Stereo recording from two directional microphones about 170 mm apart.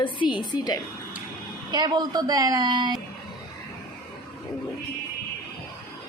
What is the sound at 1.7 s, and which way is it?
A woman's voice, 25° right (ahead or behind).